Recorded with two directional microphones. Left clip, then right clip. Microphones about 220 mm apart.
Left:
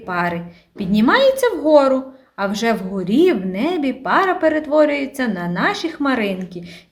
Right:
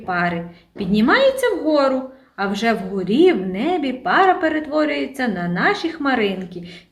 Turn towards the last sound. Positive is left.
turn(degrees=55)  # may be behind; listen again after turning